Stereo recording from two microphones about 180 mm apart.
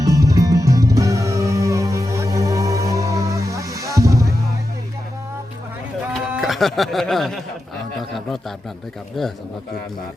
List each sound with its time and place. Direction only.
0.0 s music: 20° right (ahead or behind)
6.3 s speech: centre (ahead or behind)